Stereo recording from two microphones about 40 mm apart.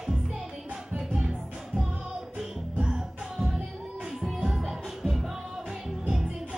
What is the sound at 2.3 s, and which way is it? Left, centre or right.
Music, centre.